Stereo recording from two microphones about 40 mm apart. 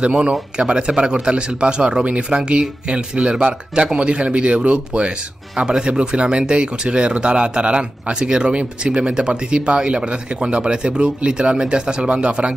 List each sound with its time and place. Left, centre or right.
0.0 s speech: right